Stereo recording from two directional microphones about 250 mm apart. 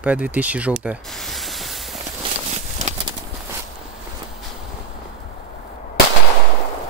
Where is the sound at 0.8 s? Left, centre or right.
Centre.